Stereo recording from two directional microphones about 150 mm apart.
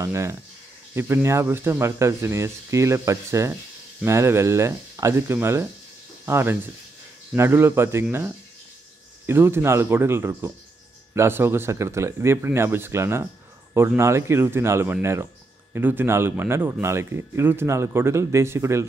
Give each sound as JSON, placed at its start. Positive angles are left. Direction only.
{"t": 0.0, "sound": "speech", "side_deg": -20}